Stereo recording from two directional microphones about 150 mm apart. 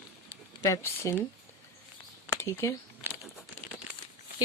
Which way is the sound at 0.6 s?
20° left (ahead or behind).